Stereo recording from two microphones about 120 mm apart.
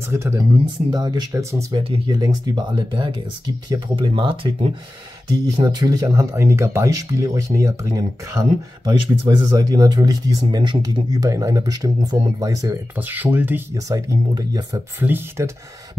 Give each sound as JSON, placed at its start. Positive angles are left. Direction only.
{"t": 0.1, "sound": "speech", "side_deg": -25}
{"t": 0.8, "sound": "speech", "side_deg": -35}
{"t": 1.7, "sound": "speech", "side_deg": -50}
{"t": 2.0, "sound": "speech", "side_deg": -35}
{"t": 5.6, "sound": "speech", "side_deg": -35}
{"t": 13.1, "sound": "speech", "side_deg": -15}
{"t": 13.8, "sound": "speech", "side_deg": -30}
{"t": 15.0, "sound": "speech", "side_deg": -15}